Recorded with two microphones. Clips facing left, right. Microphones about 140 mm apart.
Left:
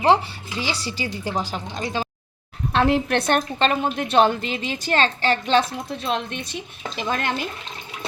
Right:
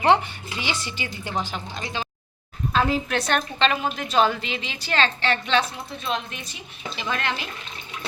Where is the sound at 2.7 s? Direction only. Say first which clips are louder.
Left 4 dB; 65° left (ahead or behind); by 5.6 s 40° left (ahead or behind).